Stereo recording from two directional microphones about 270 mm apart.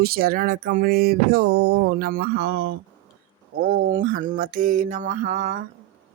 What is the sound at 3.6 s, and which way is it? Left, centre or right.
Mantra, right.